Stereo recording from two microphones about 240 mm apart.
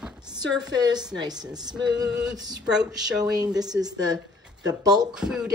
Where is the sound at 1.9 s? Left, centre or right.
Centre.